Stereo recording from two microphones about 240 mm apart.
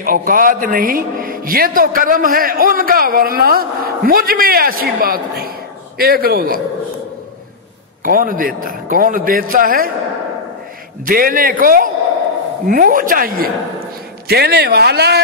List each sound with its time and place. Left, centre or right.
0.0 s a man's voice: right
8.0 s a man's voice: right
11.1 s a man's voice: right